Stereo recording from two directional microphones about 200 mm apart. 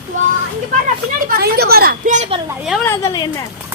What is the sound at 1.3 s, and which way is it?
Speech, 50° right (ahead or behind).